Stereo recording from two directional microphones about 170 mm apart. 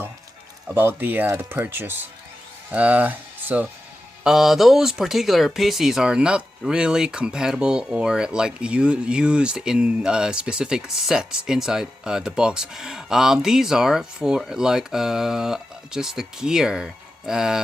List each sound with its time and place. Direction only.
0.7 s speech: 15° right (ahead or behind)